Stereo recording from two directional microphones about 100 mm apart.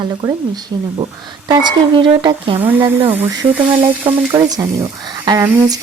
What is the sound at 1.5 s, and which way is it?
Speech, 50° right (ahead or behind).